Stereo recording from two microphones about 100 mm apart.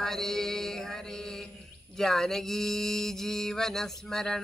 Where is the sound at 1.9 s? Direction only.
5° left (ahead or behind).